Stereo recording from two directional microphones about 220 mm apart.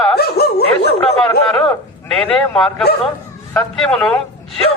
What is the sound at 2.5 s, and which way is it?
A man's voice, centre (ahead or behind).